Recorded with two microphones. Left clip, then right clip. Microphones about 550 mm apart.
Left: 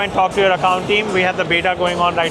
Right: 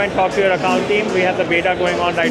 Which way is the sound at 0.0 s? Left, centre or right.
Left.